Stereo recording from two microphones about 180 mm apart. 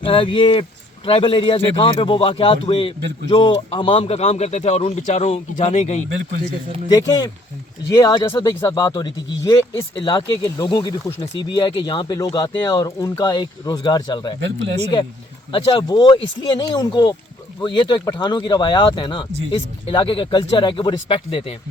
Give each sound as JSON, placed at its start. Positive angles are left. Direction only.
{"t": 0.0, "sound": "a man's voice", "side_deg": 30}
{"t": 6.9, "sound": "speech", "side_deg": 20}
{"t": 15.5, "sound": "speech", "side_deg": 25}